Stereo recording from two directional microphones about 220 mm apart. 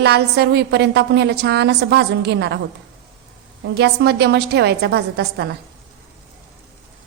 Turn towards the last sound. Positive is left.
turn(degrees=-50)  # may be behind; listen again after turning